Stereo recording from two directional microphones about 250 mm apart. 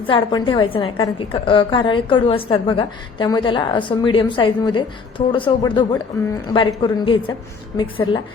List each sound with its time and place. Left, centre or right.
0.1 s a woman's voice: centre